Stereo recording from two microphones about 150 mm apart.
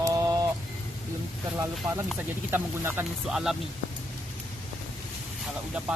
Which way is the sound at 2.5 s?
15° right (ahead or behind).